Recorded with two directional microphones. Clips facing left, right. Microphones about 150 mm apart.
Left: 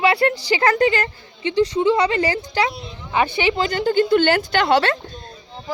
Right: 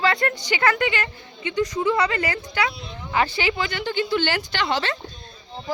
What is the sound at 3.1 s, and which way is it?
Speech, 20° left (ahead or behind).